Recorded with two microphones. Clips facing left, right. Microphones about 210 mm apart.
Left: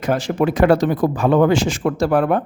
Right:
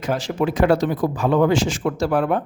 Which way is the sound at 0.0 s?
55° left (ahead or behind).